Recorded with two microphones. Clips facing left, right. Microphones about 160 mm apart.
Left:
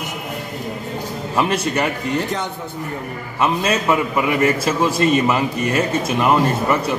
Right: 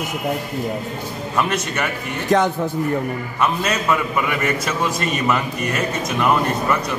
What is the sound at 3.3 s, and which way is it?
A man's voice, 25° left (ahead or behind).